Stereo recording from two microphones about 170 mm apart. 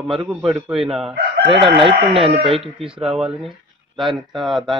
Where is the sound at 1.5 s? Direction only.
30° right (ahead or behind).